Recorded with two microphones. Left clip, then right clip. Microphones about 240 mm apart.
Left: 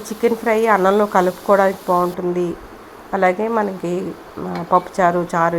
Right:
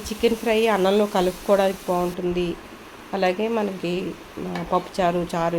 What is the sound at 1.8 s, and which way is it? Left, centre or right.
Speech, centre.